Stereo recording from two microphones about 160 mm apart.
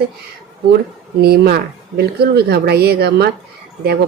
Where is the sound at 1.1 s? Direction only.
75° right (ahead or behind).